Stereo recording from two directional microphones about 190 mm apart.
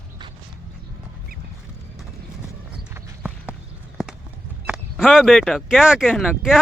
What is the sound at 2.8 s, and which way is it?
Clip-clop, 10° right (ahead or behind).